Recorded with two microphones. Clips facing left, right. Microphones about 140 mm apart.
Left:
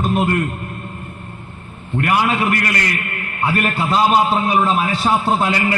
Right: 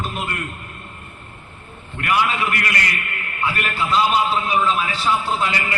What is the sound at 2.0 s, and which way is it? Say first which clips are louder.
A man's voice: left 3 dB; 40° left (ahead or behind).